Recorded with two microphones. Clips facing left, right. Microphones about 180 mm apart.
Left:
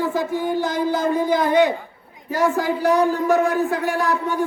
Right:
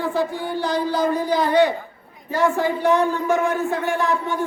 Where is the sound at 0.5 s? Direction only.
50° left (ahead or behind).